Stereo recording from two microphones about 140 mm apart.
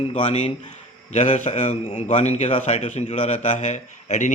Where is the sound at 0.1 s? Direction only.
50° left (ahead or behind).